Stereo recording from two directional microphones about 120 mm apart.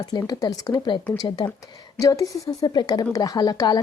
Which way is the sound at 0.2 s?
30° left (ahead or behind).